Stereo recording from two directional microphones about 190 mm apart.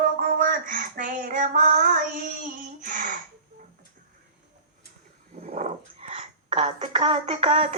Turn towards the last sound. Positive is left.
turn(degrees=-30)  # may be behind; listen again after turning